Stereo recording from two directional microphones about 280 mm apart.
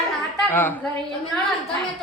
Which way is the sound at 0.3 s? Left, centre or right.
Centre.